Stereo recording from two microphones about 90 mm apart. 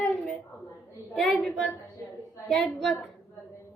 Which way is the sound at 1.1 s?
Centre (ahead or behind).